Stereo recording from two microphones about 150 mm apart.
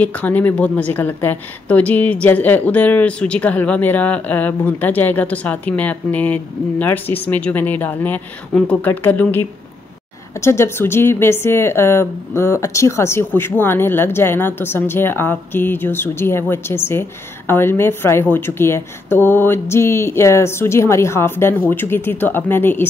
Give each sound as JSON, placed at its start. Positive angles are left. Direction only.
{"t": 0.0, "sound": "a woman's voice", "side_deg": 10}